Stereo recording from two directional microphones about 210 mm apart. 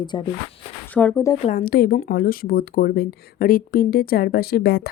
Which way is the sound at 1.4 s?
40° left (ahead or behind).